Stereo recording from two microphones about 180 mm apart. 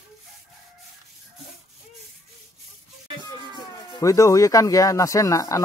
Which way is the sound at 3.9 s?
20° left (ahead or behind).